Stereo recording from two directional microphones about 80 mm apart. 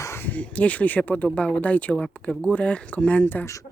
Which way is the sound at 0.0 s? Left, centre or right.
Left.